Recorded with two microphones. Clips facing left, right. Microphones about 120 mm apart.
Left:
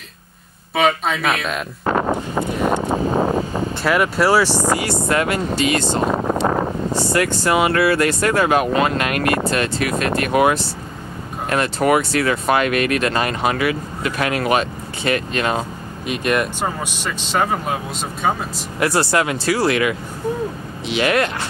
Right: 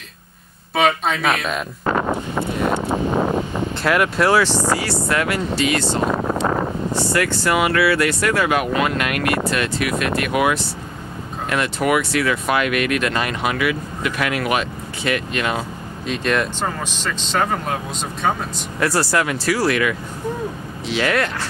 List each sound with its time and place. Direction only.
0.7 s speech: centre (ahead or behind)
1.9 s a sound: 30° left (ahead or behind)
3.3 s a sound: 35° left (ahead or behind)
3.8 s speech: centre (ahead or behind); by 6.3 s 20° left (ahead or behind)
6.4 s a sound: 30° left (ahead or behind)
7.4 s speech: 30° left (ahead or behind)
7.8 s speech: 40° left (ahead or behind)
16.1 s speech: 10° left (ahead or behind)
18.8 s speech: 20° left (ahead or behind)